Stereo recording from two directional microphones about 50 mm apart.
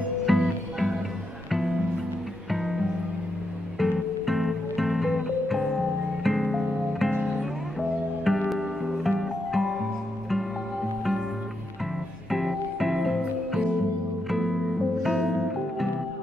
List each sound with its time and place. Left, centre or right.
0.2 s music: centre
7.2 s music: right
8.2 s music: centre
12.3 s music: centre